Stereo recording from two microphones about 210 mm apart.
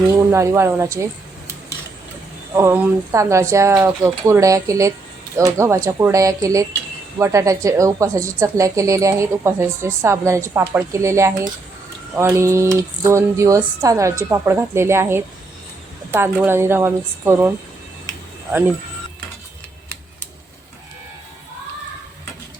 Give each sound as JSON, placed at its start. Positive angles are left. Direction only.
{"t": 0.3, "sound": "a woman's voice", "side_deg": -15}
{"t": 2.6, "sound": "a woman's voice", "side_deg": -10}